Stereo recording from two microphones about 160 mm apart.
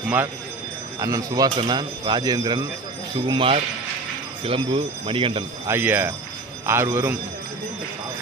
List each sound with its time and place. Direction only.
0.9 s speech: 20° right (ahead or behind)
5.6 s a man's voice: 15° right (ahead or behind)